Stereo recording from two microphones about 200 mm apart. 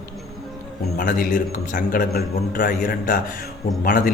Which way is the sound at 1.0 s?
45° left (ahead or behind).